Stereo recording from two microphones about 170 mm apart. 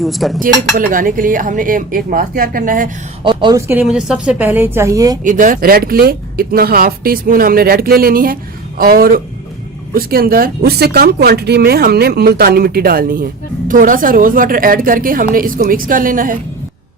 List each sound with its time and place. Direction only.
0.0 s speech: centre (ahead or behind)
0.3 s speech: 55° right (ahead or behind)
3.2 s speech: 25° right (ahead or behind)
3.7 s a woman's voice: 10° right (ahead or behind)
5.2 s speech: 50° right (ahead or behind)